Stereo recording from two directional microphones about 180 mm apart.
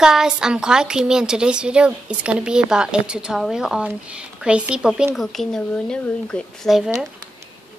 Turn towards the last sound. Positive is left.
turn(degrees=0)  # may be behind; listen again after turning